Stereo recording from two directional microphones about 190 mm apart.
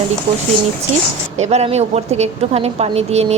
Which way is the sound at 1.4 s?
35° right (ahead or behind).